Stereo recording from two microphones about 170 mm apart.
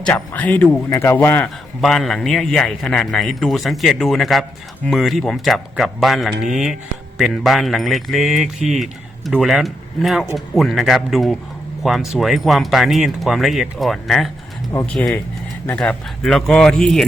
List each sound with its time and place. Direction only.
0.0 s speech: 10° left (ahead or behind)
1.8 s speech: centre (ahead or behind)
14.7 s speech: 20° left (ahead or behind)
15.6 s speech: 10° left (ahead or behind)